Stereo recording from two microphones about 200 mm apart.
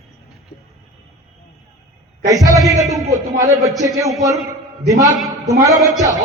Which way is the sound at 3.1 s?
15° right (ahead or behind).